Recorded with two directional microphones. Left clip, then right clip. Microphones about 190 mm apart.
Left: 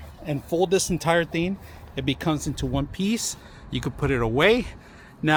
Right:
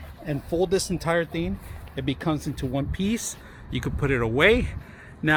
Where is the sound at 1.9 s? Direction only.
10° left (ahead or behind).